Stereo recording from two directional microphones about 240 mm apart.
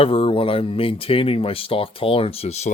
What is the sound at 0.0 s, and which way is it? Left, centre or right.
Speech, left.